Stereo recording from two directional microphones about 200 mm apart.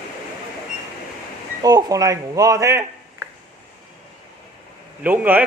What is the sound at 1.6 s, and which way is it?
Speech, 20° right (ahead or behind).